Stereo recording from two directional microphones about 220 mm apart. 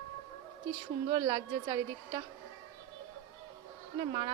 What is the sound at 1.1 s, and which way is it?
A woman's voice, 20° right (ahead or behind).